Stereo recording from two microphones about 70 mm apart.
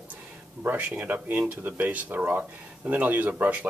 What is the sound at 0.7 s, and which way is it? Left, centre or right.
Speech, right.